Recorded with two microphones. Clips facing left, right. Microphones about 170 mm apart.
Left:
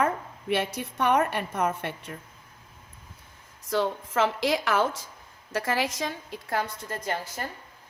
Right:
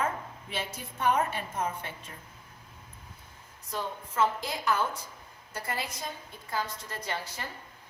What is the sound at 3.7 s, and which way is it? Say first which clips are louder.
A woman's voice: left 8 dB; 90° left.